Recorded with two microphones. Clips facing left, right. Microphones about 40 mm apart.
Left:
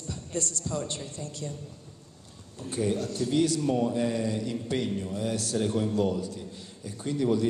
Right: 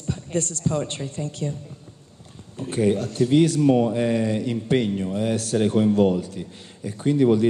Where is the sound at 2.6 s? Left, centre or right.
Right.